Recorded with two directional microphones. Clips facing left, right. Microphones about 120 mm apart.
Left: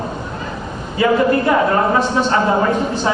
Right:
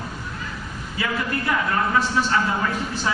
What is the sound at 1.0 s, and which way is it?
A man's voice, 30° left (ahead or behind).